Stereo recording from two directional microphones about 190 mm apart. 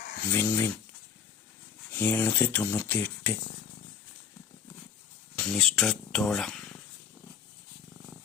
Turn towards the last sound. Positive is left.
turn(degrees=0)  # may be behind; listen again after turning